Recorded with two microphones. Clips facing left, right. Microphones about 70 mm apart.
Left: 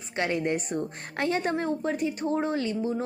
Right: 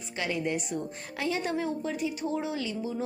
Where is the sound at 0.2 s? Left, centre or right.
Left.